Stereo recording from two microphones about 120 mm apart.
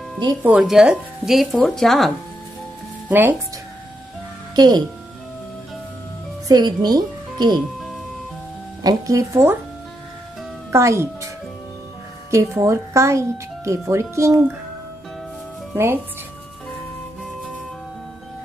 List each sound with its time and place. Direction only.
0.6 s speech: 5° right (ahead or behind)
3.1 s speech: 15° right (ahead or behind)
4.6 s speech: 35° right (ahead or behind)
6.4 s speech: 35° right (ahead or behind)
8.8 s speech: 30° right (ahead or behind)
10.7 s a woman's voice: 25° right (ahead or behind)
12.3 s speech: 25° right (ahead or behind)
15.7 s speech: 20° right (ahead or behind)